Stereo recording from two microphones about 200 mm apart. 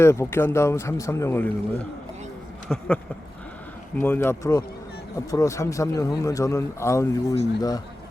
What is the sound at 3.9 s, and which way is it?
A man's voice, 10° left (ahead or behind).